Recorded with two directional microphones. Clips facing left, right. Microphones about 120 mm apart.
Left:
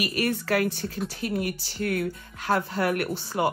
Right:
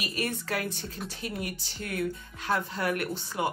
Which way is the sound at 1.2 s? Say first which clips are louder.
Left 7 dB; 55° left (ahead or behind).